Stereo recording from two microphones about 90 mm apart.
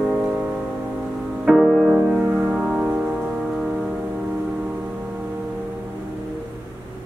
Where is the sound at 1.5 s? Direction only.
Centre (ahead or behind).